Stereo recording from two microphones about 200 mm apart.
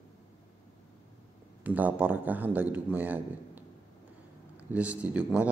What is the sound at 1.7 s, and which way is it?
Speech, 10° right (ahead or behind).